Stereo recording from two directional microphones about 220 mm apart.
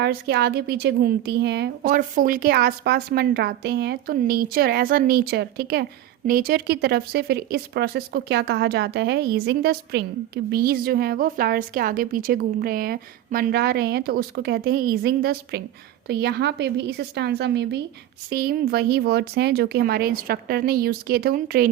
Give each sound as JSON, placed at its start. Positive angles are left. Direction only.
{"t": 0.0, "sound": "speech", "side_deg": -50}